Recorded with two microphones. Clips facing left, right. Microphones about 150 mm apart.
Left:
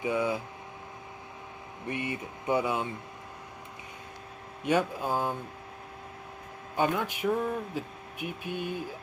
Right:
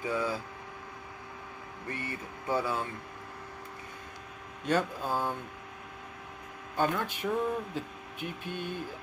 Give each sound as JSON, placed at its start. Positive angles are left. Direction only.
{"t": 0.0, "sound": "speech", "side_deg": 20}
{"t": 1.9, "sound": "speech", "side_deg": 20}
{"t": 4.6, "sound": "speech", "side_deg": 15}
{"t": 6.8, "sound": "speech", "side_deg": 10}